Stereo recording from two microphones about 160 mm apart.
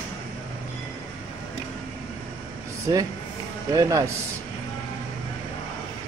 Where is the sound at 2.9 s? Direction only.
25° right (ahead or behind).